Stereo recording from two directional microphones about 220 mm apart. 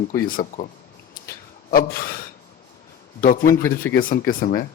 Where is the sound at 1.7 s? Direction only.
40° left (ahead or behind).